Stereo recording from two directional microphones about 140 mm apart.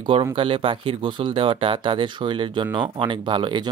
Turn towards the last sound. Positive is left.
turn(degrees=-35)  # may be behind; listen again after turning